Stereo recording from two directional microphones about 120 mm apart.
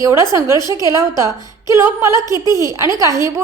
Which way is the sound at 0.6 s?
35° left (ahead or behind).